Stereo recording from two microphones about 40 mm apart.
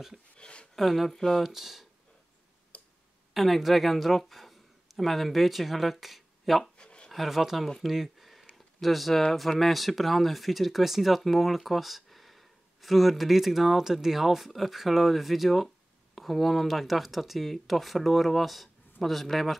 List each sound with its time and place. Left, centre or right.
0.4 s speech: left
0.7 s speech: centre
1.1 s speech: centre
1.4 s speech: centre
2.7 s tick: left
3.3 s speech: centre
6.8 s a sound: left
7.1 s speech: centre
7.8 s a sound: centre
8.8 s speech: centre